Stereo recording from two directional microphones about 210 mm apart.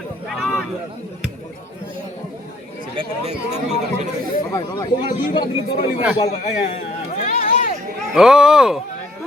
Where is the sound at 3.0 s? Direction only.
30° right (ahead or behind).